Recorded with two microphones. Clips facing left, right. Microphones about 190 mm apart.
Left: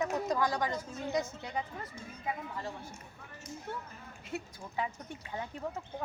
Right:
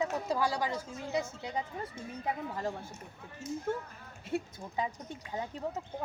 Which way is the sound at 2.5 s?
45° right (ahead or behind).